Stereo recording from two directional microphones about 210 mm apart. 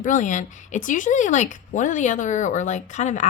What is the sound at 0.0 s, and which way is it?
A woman's voice, 35° left (ahead or behind).